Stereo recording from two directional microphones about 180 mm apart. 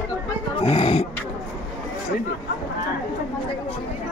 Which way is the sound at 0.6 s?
30° left (ahead or behind).